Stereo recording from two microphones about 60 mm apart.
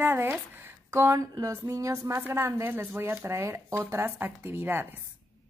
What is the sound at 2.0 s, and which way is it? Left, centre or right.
A woman's voice, right.